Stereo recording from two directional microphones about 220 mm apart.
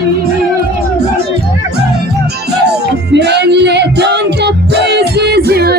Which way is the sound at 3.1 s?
50° right (ahead or behind).